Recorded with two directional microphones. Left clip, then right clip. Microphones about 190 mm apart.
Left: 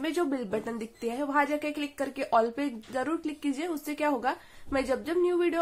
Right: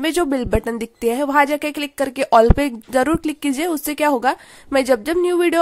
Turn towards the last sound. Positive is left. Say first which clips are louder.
# right 10 dB
turn(degrees=-55)  # may be behind; listen again after turning